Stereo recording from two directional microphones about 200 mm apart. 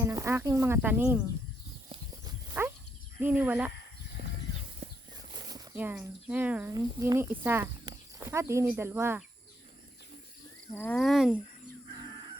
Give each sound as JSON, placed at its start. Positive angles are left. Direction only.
{"t": 0.0, "sound": "speech", "side_deg": -15}
{"t": 1.9, "sound": "livestock", "side_deg": -20}
{"t": 3.2, "sound": "speech", "side_deg": -10}
{"t": 5.7, "sound": "speech", "side_deg": -10}
{"t": 10.8, "sound": "speech", "side_deg": 5}